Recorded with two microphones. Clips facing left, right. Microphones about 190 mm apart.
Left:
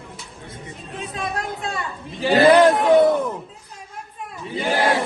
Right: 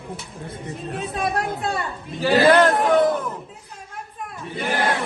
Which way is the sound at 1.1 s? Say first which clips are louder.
Right 3 dB; 35° right (ahead or behind).